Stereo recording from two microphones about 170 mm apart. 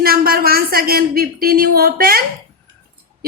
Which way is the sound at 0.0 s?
60° right (ahead or behind).